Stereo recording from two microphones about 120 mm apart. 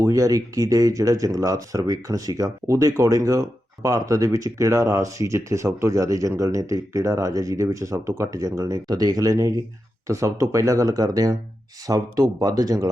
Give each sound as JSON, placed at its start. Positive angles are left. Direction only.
{"t": 0.0, "sound": "speech", "side_deg": -30}